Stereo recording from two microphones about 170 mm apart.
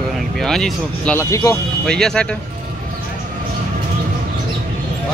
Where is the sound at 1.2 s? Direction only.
15° left (ahead or behind).